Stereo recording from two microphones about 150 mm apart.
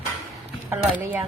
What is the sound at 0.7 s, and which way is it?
Speech, 10° right (ahead or behind).